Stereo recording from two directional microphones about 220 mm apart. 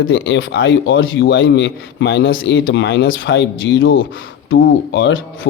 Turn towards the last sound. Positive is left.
turn(degrees=60)  # may be behind; listen again after turning